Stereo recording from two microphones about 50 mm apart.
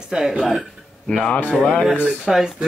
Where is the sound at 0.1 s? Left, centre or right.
Centre.